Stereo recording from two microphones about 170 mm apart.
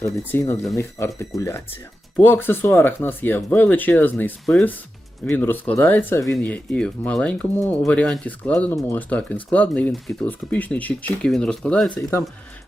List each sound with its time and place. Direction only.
0.0 s speech: 15° left (ahead or behind)